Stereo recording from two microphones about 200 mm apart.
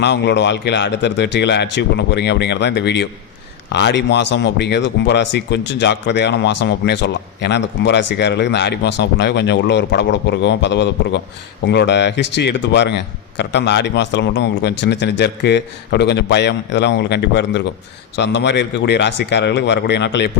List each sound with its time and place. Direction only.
0.0 s speech: 60° left (ahead or behind)